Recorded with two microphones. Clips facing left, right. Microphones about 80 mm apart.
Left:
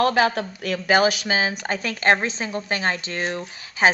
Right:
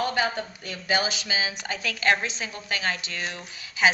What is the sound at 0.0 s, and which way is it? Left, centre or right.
Speech, left.